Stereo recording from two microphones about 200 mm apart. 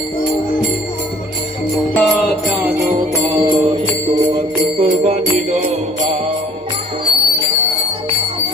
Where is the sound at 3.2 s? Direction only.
25° right (ahead or behind).